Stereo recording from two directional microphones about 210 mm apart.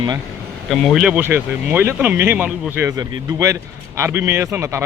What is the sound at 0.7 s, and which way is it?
Speech, centre (ahead or behind).